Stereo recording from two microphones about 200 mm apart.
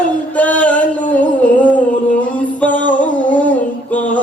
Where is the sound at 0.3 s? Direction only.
5° left (ahead or behind).